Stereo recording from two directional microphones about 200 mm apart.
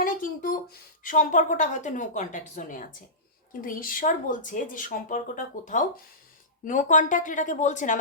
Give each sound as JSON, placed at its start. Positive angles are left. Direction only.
{"t": 0.0, "sound": "a woman's voice", "side_deg": 45}